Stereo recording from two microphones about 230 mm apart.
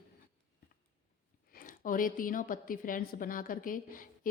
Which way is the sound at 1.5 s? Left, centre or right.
Left.